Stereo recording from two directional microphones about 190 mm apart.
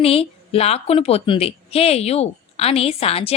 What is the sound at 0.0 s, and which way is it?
Speech, 30° left (ahead or behind).